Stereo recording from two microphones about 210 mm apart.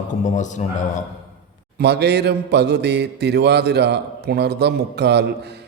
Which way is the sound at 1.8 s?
50° right (ahead or behind).